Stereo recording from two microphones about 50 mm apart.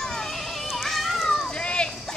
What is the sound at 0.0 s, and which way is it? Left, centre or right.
Children playing, centre.